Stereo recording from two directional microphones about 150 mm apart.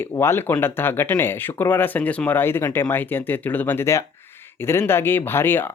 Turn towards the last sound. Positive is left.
turn(degrees=15)  # may be behind; listen again after turning